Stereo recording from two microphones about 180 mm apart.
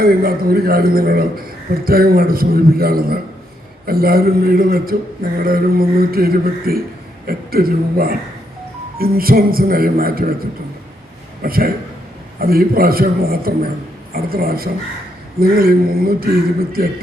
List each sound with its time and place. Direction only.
0.0 s a man's voice: 55° right (ahead or behind)
11.4 s a man's voice: 55° right (ahead or behind)